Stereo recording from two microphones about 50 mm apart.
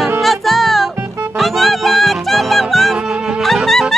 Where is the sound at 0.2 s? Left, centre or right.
Centre.